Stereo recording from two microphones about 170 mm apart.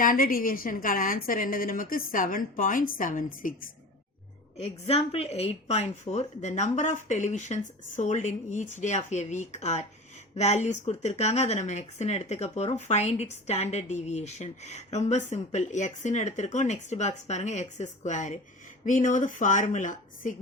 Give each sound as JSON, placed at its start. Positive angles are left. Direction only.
{"t": 0.0, "sound": "a woman's voice", "side_deg": 55}
{"t": 4.5, "sound": "a woman's voice", "side_deg": 40}